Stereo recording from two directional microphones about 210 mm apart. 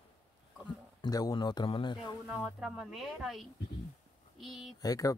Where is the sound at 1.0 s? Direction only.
20° left (ahead or behind).